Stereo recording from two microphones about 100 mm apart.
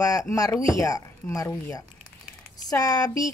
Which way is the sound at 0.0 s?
35° left (ahead or behind).